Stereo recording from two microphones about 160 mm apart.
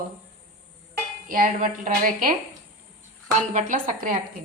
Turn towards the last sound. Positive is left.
turn(degrees=-55)  # may be behind; listen again after turning